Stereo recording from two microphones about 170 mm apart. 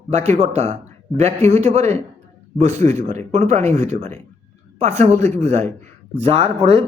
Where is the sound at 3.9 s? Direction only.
40° right (ahead or behind).